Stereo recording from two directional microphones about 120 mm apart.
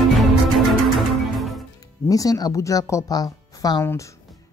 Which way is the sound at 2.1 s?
30° left (ahead or behind).